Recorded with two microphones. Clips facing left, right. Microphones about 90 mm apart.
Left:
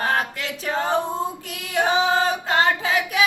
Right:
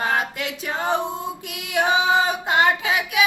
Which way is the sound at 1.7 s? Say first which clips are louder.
Right 1 dB; 15° right (ahead or behind).